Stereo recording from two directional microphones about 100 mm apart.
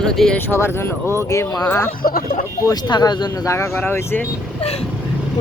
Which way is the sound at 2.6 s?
40° left (ahead or behind).